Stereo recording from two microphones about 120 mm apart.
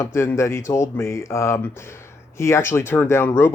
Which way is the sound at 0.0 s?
20° left (ahead or behind).